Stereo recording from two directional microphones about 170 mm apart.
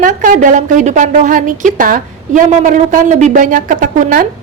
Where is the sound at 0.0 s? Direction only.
50° right (ahead or behind).